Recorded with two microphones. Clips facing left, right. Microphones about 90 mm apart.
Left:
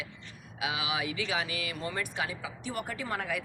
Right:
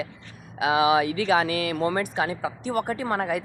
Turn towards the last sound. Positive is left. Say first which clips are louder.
# right 9 dB
turn(degrees=-40)  # may be behind; listen again after turning